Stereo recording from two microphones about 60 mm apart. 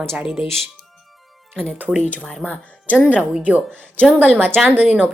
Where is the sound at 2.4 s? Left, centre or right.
Left.